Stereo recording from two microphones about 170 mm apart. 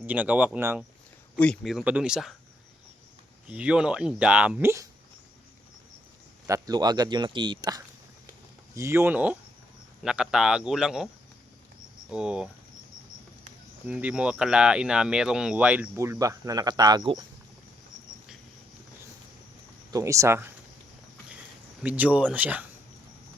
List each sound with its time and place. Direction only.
0.0 s speech: 10° right (ahead or behind)
1.4 s a man's voice: centre (ahead or behind)
3.5 s speech: 5° right (ahead or behind)
6.5 s a man's voice: 25° right (ahead or behind); by 11.1 s centre (ahead or behind)
12.1 s a man's voice: 5° right (ahead or behind)
13.8 s speech: 10° right (ahead or behind); by 17.0 s 25° right (ahead or behind)
19.9 s speech: 20° right (ahead or behind)
21.8 s speech: 10° right (ahead or behind)